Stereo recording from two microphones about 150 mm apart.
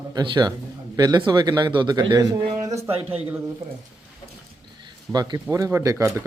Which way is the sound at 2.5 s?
50° right (ahead or behind).